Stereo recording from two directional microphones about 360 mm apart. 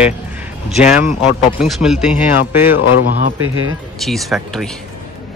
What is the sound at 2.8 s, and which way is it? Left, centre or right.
Speech, left.